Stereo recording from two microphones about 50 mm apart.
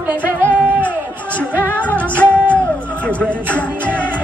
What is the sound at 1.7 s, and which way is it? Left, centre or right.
Music, left.